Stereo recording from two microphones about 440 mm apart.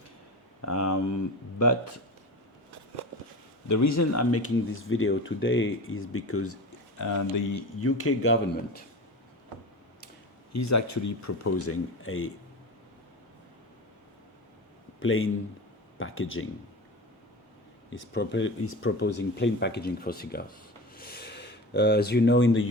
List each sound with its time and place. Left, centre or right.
0.6 s speech: left
3.9 s speech: left
7.0 s speech: left
7.8 s speech: left
10.5 s speech: left
14.9 s speech: left
17.9 s speech: left
20.9 s a sound: left